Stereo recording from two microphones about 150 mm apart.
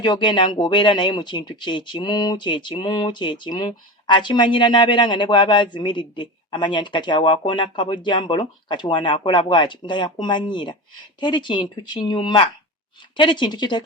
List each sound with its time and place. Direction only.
0.0 s speech: 30° left (ahead or behind)